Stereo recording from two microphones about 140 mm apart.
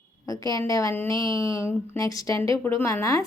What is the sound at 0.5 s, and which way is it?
A woman's voice, 25° left (ahead or behind).